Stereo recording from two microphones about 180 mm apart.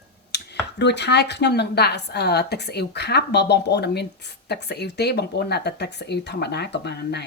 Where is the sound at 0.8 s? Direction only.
70° left (ahead or behind).